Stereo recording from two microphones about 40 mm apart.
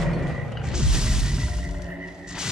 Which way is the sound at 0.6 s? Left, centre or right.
Centre.